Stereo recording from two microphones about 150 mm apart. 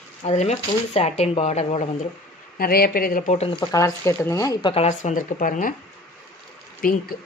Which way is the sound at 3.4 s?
30° left (ahead or behind).